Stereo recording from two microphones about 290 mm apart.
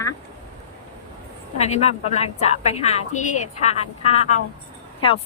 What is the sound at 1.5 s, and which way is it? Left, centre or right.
A woman's voice, left.